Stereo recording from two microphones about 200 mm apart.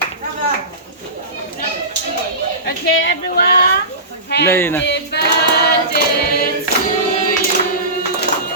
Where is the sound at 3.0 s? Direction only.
55° left (ahead or behind).